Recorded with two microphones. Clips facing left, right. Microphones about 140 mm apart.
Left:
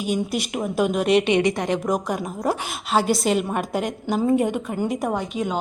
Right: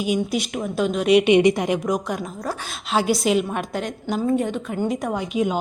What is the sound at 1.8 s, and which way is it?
Speech, 5° left (ahead or behind).